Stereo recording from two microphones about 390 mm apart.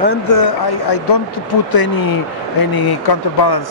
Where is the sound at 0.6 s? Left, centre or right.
Left.